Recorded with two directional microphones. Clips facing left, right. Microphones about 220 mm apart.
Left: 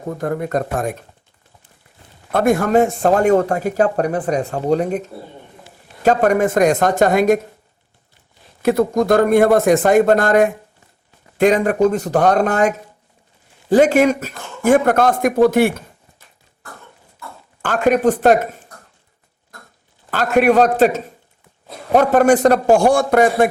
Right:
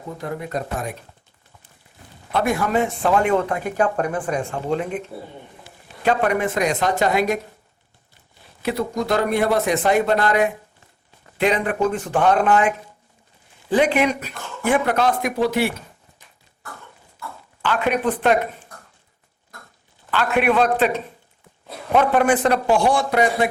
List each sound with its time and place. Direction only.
0.0 s speech: 50° left (ahead or behind)
2.3 s speech: 45° left (ahead or behind)
8.6 s speech: 50° left (ahead or behind)
17.6 s speech: 45° left (ahead or behind)
20.1 s speech: 40° left (ahead or behind)